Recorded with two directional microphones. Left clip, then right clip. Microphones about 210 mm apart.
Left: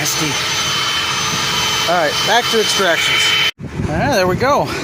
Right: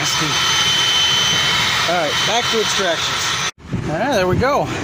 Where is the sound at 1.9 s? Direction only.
10° left (ahead or behind).